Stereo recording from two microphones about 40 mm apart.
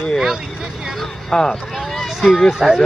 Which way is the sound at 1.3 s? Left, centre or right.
Centre.